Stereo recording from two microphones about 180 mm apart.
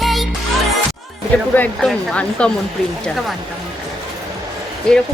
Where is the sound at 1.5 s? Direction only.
10° left (ahead or behind).